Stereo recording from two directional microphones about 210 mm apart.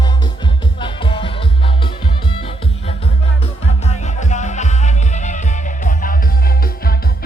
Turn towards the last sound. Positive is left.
turn(degrees=45)  # may be behind; listen again after turning